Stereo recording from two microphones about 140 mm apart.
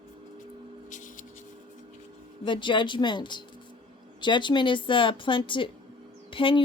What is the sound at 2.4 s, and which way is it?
Speech, 35° left (ahead or behind).